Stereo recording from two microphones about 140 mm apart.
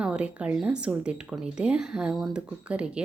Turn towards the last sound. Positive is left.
turn(degrees=-10)  # may be behind; listen again after turning